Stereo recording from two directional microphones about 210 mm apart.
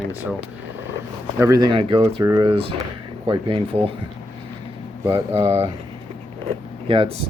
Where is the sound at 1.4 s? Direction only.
20° right (ahead or behind).